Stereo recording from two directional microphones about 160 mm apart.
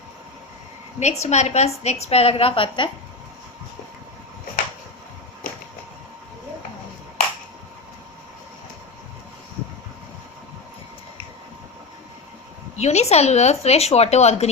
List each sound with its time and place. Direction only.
0.9 s a woman's voice: 45° left (ahead or behind)
12.7 s speech: 45° left (ahead or behind)